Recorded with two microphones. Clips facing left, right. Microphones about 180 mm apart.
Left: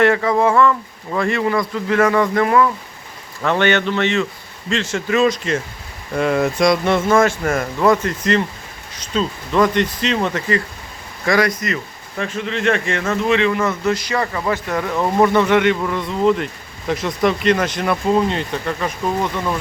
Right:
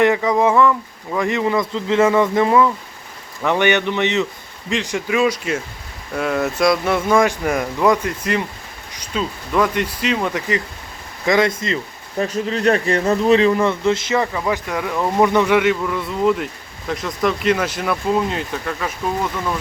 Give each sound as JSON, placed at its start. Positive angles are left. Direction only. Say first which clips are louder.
{"t": 0.0, "sound": "speech", "louder": "even", "side_deg": -15}
{"t": 11.3, "sound": "speech", "louder": "right 1 dB", "side_deg": -25}
{"t": 12.3, "sound": "a man's voice", "louder": "right 1 dB", "side_deg": -40}
{"t": 13.7, "sound": "speech", "louder": "right 2 dB", "side_deg": -25}
{"t": 14.3, "sound": "speech", "louder": "left 1 dB", "side_deg": -5}